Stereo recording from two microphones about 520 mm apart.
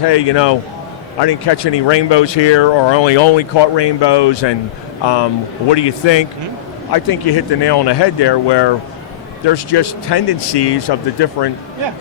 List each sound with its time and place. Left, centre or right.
0.1 s speech: left